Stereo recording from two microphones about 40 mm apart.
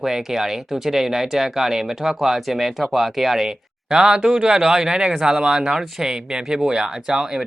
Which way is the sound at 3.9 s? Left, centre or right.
Centre.